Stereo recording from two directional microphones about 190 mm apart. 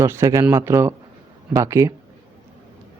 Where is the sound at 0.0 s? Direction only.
15° right (ahead or behind).